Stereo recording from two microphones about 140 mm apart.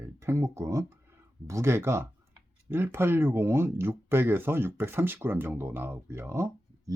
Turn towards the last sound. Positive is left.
turn(degrees=-20)  # may be behind; listen again after turning